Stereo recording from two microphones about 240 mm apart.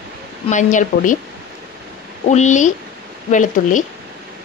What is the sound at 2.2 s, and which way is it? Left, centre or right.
A woman's voice, left.